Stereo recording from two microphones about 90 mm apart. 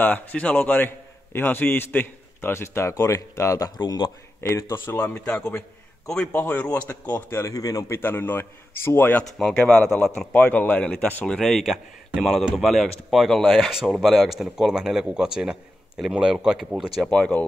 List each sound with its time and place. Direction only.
0.0 s a man's voice: 15° left (ahead or behind); by 3.7 s 35° left (ahead or behind)
3.7 s speech: 50° left (ahead or behind)
4.4 s a man's voice: 35° left (ahead or behind)
4.8 s a man's voice: 20° left (ahead or behind)
7.5 s a man's voice: 40° left (ahead or behind)
7.9 s a man's voice: 25° left (ahead or behind)
9.2 s speech: 5° left (ahead or behind)
17.1 s speech: 15° left (ahead or behind)